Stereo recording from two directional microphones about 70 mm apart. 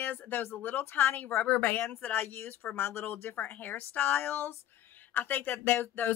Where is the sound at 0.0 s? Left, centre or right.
Left.